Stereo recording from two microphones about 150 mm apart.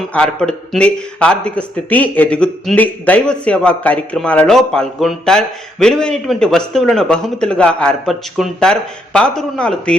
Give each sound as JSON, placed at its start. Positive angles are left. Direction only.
{"t": 0.1, "sound": "speech", "side_deg": 5}